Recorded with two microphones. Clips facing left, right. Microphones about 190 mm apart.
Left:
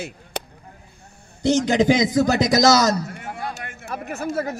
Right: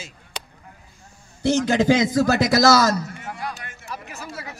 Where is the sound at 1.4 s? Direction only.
15° left (ahead or behind).